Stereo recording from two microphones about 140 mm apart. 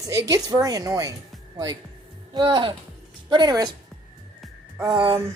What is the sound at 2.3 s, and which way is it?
A woman's voice, 35° right (ahead or behind).